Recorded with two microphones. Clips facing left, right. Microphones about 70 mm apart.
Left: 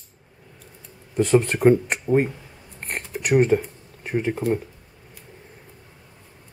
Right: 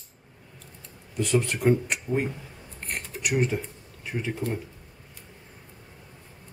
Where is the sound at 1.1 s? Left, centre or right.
Left.